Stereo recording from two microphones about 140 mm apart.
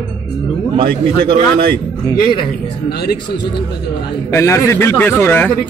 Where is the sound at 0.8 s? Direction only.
90° right.